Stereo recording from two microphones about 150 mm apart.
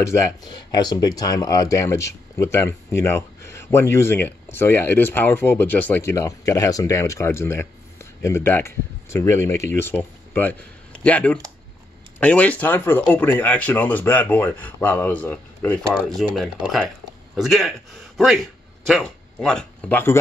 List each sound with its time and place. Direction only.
0.0 s a man's voice: 20° left (ahead or behind)